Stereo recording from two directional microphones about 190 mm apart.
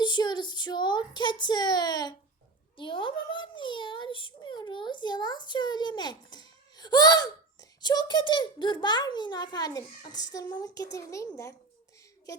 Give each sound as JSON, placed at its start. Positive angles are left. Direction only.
{"t": 0.0, "sound": "a child's voice", "side_deg": 25}